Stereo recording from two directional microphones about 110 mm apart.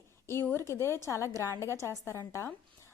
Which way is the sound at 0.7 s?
25° left (ahead or behind).